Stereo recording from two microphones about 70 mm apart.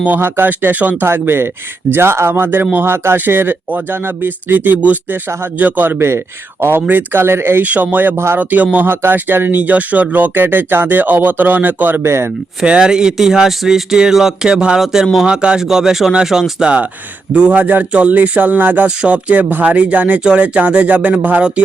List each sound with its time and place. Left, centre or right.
0.0 s speech: right
8.4 s speech: right
12.0 s speech: right
12.6 s speech: centre
17.3 s speech: centre